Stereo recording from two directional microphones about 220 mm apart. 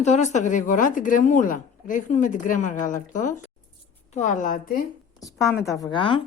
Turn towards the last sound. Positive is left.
turn(degrees=20)  # may be behind; listen again after turning